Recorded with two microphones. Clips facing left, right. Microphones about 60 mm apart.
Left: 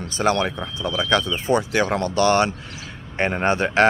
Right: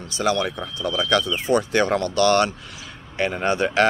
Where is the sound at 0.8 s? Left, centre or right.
Left.